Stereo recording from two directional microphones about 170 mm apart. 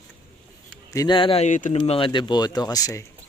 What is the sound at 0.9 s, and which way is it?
Speech, 25° left (ahead or behind).